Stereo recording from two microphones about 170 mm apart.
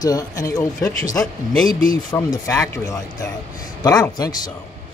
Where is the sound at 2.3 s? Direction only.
20° left (ahead or behind).